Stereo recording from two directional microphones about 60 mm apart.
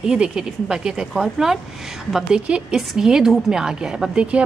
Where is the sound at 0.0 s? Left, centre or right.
Centre.